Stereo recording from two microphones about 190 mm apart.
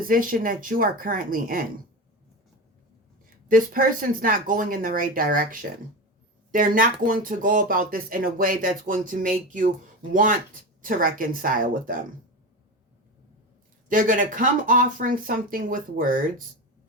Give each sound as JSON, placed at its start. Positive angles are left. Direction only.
{"t": 0.1, "sound": "speech", "side_deg": -45}
{"t": 3.5, "sound": "speech", "side_deg": -45}
{"t": 13.8, "sound": "speech", "side_deg": -45}